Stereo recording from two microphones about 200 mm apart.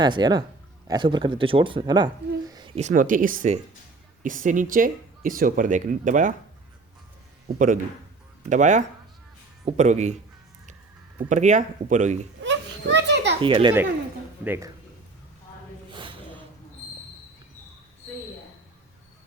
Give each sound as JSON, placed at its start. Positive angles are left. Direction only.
{"t": 0.0, "sound": "speech", "side_deg": -20}
{"t": 2.7, "sound": "speech", "side_deg": -40}
{"t": 7.4, "sound": "a man's voice", "side_deg": -40}
{"t": 11.3, "sound": "speech", "side_deg": -35}
{"t": 12.4, "sound": "children playing", "side_deg": -65}
{"t": 13.4, "sound": "speech", "side_deg": -25}
{"t": 14.4, "sound": "speech", "side_deg": -10}